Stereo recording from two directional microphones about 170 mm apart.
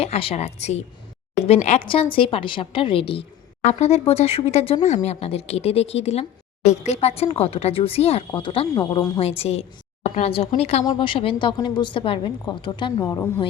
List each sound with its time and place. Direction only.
0.0 s a woman's voice: 35° left (ahead or behind); by 9.1 s 20° left (ahead or behind)
9.1 s a woman's voice: 35° left (ahead or behind); by 13.4 s 15° left (ahead or behind)